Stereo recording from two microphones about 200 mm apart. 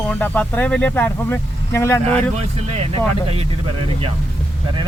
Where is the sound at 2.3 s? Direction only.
30° right (ahead or behind).